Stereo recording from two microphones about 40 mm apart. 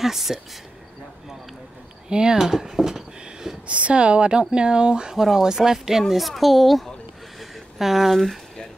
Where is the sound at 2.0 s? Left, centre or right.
Centre.